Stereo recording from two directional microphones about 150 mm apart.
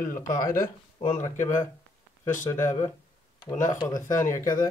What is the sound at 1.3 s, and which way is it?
Speech, 55° left (ahead or behind).